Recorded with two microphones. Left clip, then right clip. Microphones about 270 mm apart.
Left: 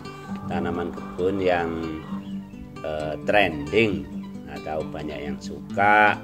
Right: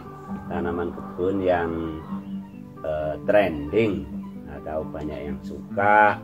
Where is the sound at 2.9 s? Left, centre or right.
Left.